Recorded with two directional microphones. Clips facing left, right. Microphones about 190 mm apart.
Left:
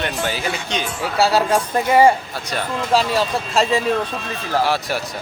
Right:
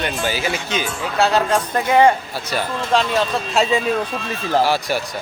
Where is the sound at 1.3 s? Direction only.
10° left (ahead or behind).